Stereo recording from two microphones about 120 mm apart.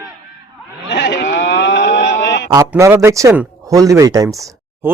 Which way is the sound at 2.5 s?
25° right (ahead or behind).